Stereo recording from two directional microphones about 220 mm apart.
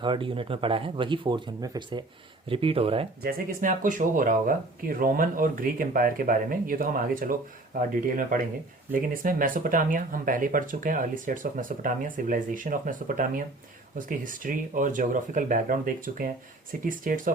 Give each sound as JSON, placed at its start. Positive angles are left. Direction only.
{"t": 0.0, "sound": "speech", "side_deg": -20}
{"t": 3.2, "sound": "speech", "side_deg": -40}